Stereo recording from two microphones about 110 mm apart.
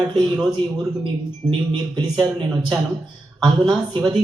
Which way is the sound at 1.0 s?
45° right (ahead or behind).